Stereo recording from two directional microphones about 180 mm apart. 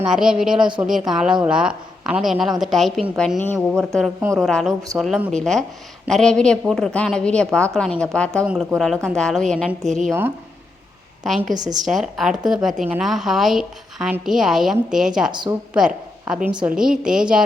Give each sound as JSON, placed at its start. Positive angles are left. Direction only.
{"t": 0.0, "sound": "a woman's voice", "side_deg": -5}
{"t": 11.2, "sound": "a woman's voice", "side_deg": 0}
{"t": 11.5, "sound": "a woman's voice", "side_deg": -20}
{"t": 11.9, "sound": "a woman's voice", "side_deg": 0}
{"t": 15.3, "sound": "a woman's voice", "side_deg": -25}
{"t": 15.7, "sound": "a woman's voice", "side_deg": -5}